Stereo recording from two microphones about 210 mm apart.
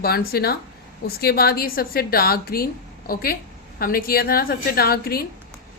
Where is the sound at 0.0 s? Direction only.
45° left (ahead or behind).